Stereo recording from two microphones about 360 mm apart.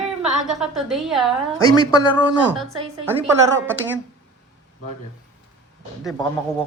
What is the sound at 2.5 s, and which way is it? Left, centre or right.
Speech, centre.